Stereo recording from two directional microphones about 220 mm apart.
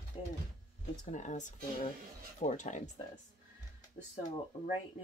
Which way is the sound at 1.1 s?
35° left (ahead or behind).